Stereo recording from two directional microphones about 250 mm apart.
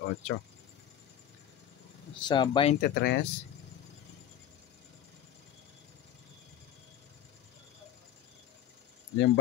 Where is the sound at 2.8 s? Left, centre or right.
Left.